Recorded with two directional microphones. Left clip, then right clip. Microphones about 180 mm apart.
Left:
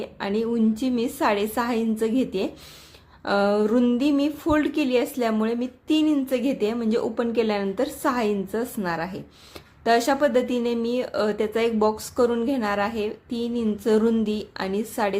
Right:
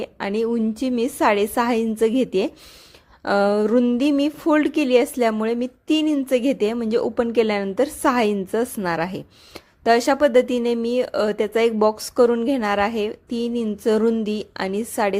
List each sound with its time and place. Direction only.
0.0 s speech: 40° right (ahead or behind)